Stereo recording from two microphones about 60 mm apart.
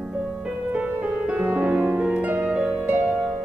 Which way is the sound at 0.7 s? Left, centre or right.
Right.